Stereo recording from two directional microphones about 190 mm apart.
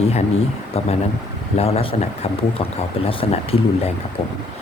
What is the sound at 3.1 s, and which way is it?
Speech, 30° left (ahead or behind).